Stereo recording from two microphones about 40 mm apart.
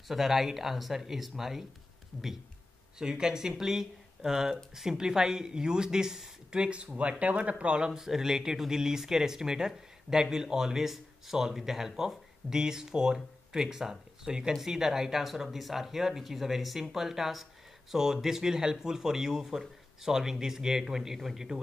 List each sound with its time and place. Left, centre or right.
0.1 s speech: centre
3.0 s speech: centre
6.6 s speech: right; by 21.5 s centre